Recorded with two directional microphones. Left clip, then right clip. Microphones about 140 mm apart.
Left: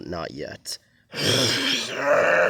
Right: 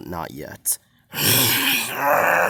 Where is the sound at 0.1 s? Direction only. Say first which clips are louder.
Even; 40° right (ahead or behind).